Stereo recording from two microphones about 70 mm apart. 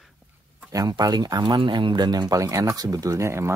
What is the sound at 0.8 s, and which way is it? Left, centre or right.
Speech, right.